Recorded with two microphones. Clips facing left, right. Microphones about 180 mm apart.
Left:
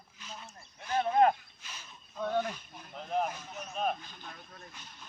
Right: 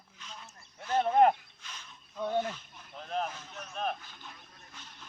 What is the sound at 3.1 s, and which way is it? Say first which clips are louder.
Vehicle: left 3 dB; 10° left (ahead or behind).